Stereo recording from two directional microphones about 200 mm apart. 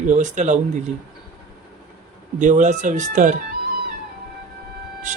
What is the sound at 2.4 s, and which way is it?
Speech, 40° right (ahead or behind).